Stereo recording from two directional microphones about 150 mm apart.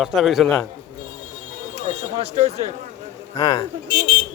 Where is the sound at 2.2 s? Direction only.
45° right (ahead or behind).